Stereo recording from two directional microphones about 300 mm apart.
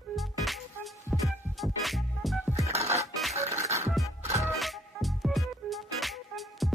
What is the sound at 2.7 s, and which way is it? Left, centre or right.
Music, right.